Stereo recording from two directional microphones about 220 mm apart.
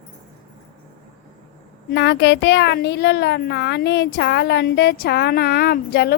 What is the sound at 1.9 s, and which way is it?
Speech, 50° left (ahead or behind).